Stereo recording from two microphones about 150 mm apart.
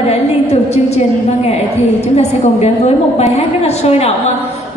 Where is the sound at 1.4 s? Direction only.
45° left (ahead or behind).